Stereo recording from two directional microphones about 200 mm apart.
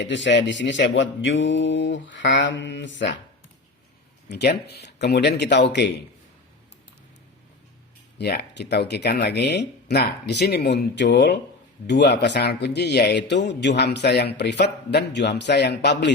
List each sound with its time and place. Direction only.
0.0 s speech: 65° left (ahead or behind)
4.3 s speech: 55° left (ahead or behind)
8.2 s speech: 55° left (ahead or behind)